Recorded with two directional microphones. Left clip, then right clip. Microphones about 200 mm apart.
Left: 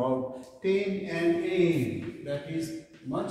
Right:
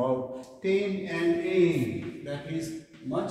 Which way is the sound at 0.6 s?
10° left (ahead or behind).